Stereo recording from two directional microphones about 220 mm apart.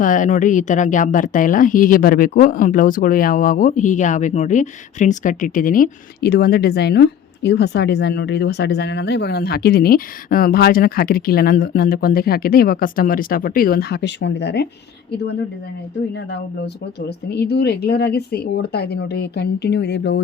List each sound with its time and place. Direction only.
0.0 s speech: 35° left (ahead or behind)
16.1 s speech: 50° left (ahead or behind)